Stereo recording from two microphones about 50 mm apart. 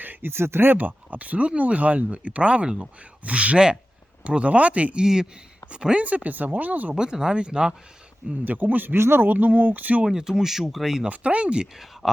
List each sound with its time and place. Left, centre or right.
0.0 s a sound: right
0.3 s speech: right
2.6 s speech: centre
3.2 s speech: right
5.0 s speech: centre
5.7 s speech: right
6.1 s speech: right
6.9 s speech: centre
8.4 s speech: right
9.0 s speech: right
10.1 s speech: centre
11.1 s speech: right